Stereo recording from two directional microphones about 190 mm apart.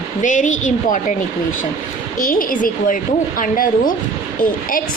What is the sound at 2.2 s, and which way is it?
A woman's voice, 45° left (ahead or behind).